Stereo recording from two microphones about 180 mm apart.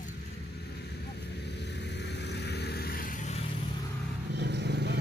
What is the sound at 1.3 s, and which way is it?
Vehicle, 70° left (ahead or behind).